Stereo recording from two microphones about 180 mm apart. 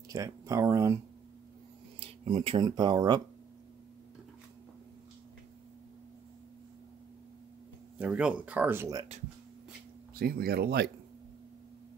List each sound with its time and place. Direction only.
0.1 s speech: 20° right (ahead or behind)
2.0 s speech: 30° right (ahead or behind)
8.0 s speech: 5° right (ahead or behind)
10.1 s speech: 55° right (ahead or behind)